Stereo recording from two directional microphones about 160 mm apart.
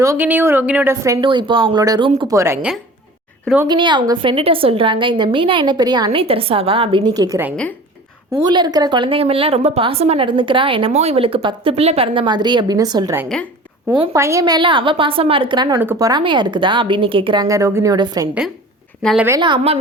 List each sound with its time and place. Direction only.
0.0 s speech: 15° right (ahead or behind)
1.2 s a woman's voice: 30° right (ahead or behind)
2.3 s speech: 20° right (ahead or behind)
3.7 s a woman's voice: 30° right (ahead or behind)
7.2 s a woman's voice: 15° right (ahead or behind)
19.4 s a woman's voice: 30° right (ahead or behind)